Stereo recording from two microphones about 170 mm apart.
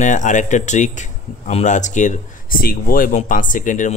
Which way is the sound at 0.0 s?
45° left (ahead or behind).